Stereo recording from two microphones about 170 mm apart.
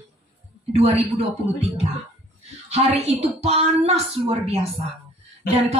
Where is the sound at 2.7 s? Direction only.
35° right (ahead or behind).